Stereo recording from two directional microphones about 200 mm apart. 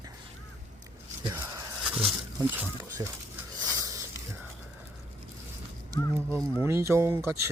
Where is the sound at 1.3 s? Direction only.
15° right (ahead or behind).